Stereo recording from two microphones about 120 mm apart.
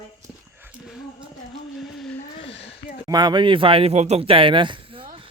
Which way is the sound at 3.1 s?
35° right (ahead or behind).